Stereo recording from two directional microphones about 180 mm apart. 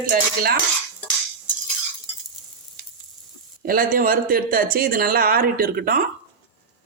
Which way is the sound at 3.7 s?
50° right (ahead or behind).